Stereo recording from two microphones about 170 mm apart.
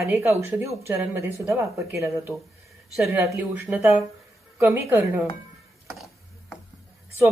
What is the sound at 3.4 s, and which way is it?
A woman's voice, 10° right (ahead or behind).